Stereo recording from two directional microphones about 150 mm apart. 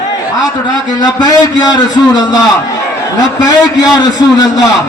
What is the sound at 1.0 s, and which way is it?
A man's voice, 25° left (ahead or behind).